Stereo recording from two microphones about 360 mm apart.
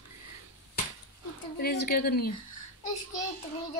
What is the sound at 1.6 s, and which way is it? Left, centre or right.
Speech, left.